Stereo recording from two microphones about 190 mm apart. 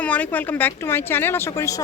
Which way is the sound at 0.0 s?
10° left (ahead or behind).